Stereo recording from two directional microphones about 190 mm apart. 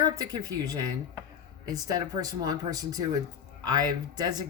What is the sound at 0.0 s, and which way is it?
Speech, 20° right (ahead or behind).